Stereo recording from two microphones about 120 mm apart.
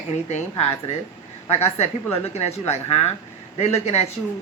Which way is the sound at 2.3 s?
65° left (ahead or behind).